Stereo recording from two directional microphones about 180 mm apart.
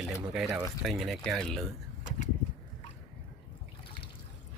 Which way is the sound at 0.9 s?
Centre (ahead or behind).